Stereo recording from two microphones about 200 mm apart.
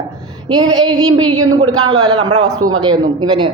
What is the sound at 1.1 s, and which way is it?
A man's voice, 90° right.